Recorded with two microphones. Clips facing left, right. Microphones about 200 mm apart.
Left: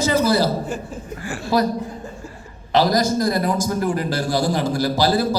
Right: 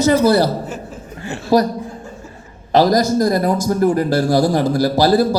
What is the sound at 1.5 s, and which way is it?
Speech, 40° right (ahead or behind).